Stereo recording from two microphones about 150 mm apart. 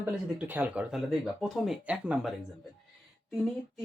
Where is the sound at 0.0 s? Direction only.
10° right (ahead or behind).